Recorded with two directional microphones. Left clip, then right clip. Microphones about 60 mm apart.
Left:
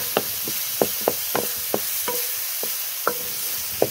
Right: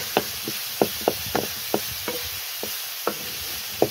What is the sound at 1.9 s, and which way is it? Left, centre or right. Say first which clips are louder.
Stir: left 2 dB; left.